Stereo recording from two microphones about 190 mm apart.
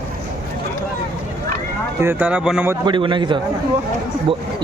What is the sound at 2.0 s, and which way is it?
Speech, 10° right (ahead or behind).